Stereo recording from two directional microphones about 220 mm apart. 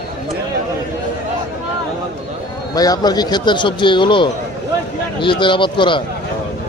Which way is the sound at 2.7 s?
15° left (ahead or behind).